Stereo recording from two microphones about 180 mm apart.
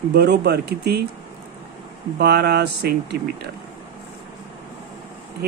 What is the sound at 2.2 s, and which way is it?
Speech, 65° right (ahead or behind).